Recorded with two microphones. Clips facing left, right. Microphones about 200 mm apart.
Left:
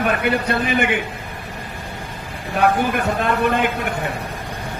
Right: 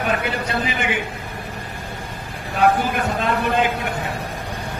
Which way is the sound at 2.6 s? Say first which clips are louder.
Even; 60° left (ahead or behind).